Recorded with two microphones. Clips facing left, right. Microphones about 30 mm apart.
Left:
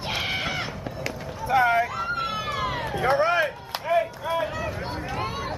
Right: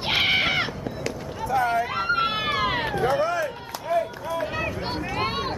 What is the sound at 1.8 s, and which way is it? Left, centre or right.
Vehicle, right.